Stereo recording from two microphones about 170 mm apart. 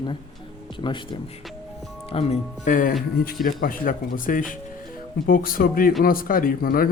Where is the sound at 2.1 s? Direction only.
45° left (ahead or behind).